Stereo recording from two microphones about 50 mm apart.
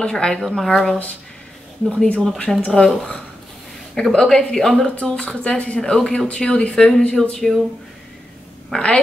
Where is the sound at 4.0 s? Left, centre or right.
Centre.